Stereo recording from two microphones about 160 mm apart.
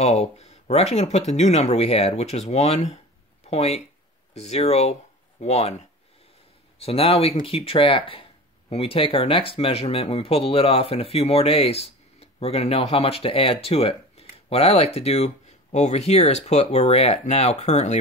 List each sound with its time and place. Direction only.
0.0 s speech: 40° left (ahead or behind)